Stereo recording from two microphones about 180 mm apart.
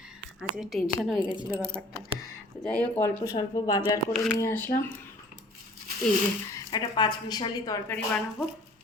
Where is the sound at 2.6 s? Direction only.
5° left (ahead or behind).